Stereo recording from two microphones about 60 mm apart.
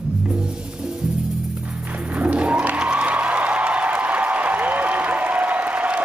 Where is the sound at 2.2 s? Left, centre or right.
Centre.